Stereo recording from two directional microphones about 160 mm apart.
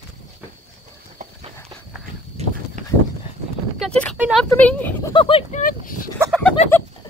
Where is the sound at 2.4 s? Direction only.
40° right (ahead or behind).